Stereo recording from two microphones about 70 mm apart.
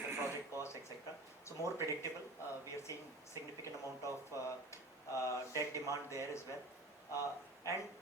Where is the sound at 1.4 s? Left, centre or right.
Left.